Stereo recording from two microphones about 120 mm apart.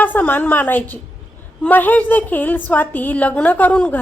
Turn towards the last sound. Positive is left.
turn(degrees=10)  # may be behind; listen again after turning